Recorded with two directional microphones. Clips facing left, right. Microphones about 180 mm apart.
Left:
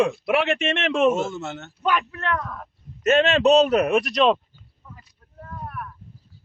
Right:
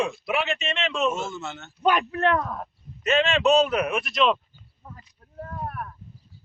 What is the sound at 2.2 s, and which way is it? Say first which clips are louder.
Speech: right 4 dB; 25° right (ahead or behind).